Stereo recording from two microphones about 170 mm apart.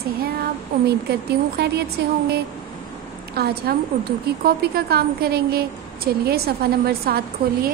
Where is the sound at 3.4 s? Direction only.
70° right (ahead or behind).